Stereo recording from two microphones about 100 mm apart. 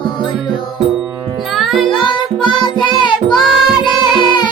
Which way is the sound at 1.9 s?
55° left (ahead or behind).